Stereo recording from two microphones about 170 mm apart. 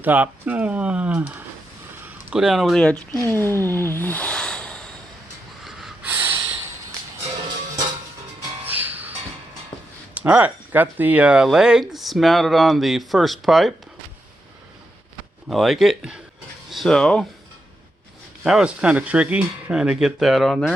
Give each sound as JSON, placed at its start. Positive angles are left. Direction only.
{"t": 0.0, "sound": "speech", "side_deg": -10}
{"t": 3.2, "sound": "a sound", "side_deg": 15}
{"t": 5.6, "sound": "snort", "side_deg": 0}
{"t": 6.1, "sound": "snort", "side_deg": -15}
{"t": 8.6, "sound": "music", "side_deg": -10}
{"t": 10.2, "sound": "speech", "side_deg": -10}
{"t": 15.4, "sound": "a sound", "side_deg": 0}
{"t": 16.7, "sound": "speech", "side_deg": 5}
{"t": 18.4, "sound": "speech", "side_deg": -5}